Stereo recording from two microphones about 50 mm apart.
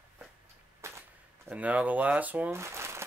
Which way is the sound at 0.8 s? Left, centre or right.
Right.